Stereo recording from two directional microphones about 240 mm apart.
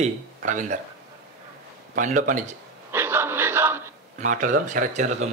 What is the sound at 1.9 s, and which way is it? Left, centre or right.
Speech, right.